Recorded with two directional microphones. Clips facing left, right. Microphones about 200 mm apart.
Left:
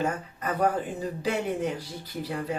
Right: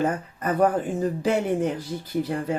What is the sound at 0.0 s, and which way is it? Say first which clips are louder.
Speech: right 4 dB; 50° right (ahead or behind).